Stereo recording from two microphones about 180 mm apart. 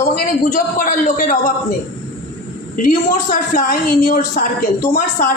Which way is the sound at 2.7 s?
45° left (ahead or behind).